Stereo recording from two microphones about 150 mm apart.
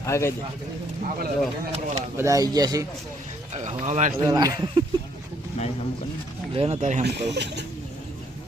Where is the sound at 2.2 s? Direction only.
20° right (ahead or behind).